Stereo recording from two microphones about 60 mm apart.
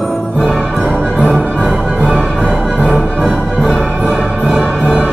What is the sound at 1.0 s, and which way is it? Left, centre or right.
Music, left.